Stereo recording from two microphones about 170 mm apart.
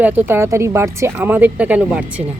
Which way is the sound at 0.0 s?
10° right (ahead or behind).